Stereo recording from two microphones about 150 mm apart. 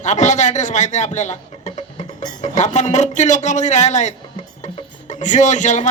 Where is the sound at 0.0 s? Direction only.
55° left (ahead or behind).